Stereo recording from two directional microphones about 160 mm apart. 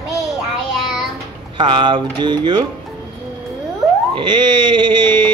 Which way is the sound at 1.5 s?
30° right (ahead or behind).